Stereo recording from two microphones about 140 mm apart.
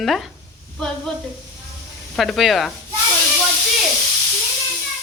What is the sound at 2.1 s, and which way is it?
Humming, centre (ahead or behind).